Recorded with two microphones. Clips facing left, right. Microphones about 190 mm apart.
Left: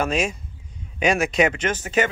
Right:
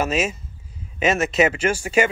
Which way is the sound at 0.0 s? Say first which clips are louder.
Right 1 dB; 5° right (ahead or behind).